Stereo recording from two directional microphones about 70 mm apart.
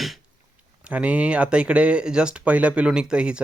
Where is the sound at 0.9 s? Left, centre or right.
Centre.